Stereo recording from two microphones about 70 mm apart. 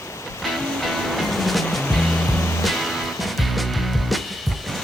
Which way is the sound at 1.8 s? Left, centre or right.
Centre.